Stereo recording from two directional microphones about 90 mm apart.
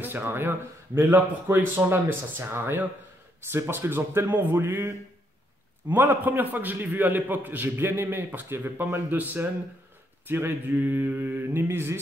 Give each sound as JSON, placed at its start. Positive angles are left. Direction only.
{"t": 0.0, "sound": "a man's voice", "side_deg": -25}